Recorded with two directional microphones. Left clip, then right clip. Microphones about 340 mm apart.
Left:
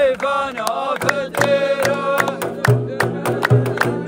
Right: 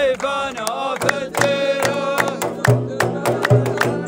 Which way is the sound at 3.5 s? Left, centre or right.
Right.